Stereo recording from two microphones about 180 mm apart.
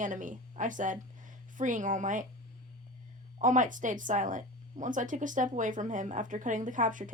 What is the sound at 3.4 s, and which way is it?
Speech, 45° right (ahead or behind).